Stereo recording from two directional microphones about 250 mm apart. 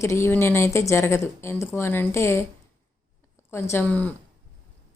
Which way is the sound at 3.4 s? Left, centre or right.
Centre.